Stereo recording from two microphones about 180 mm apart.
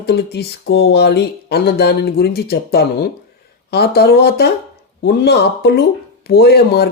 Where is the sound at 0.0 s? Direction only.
65° left (ahead or behind).